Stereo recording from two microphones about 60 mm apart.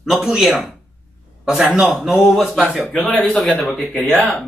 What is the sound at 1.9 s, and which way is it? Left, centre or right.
Speech, centre.